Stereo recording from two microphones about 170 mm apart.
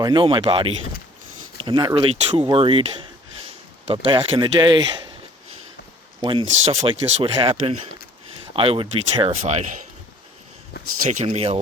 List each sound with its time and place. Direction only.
0.0 s speech: 30° right (ahead or behind)
6.5 s speech: 35° right (ahead or behind)
10.8 s speech: 70° left (ahead or behind)
11.1 s speech: 40° right (ahead or behind)